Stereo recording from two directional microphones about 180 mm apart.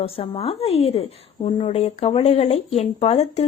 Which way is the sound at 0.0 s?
35° left (ahead or behind).